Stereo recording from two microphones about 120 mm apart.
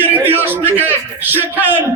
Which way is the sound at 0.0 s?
15° right (ahead or behind).